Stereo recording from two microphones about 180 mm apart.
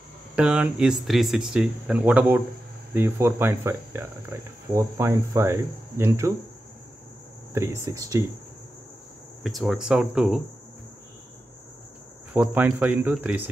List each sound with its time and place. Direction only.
0.4 s speech: 5° right (ahead or behind)
7.5 s speech: 15° right (ahead or behind)
9.4 s speech: centre (ahead or behind)
12.4 s speech: 10° right (ahead or behind)